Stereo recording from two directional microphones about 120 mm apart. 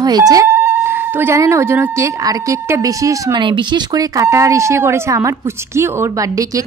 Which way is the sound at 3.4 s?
40° right (ahead or behind).